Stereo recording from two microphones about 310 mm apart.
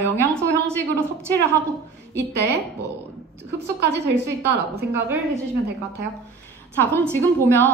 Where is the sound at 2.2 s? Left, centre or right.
Right.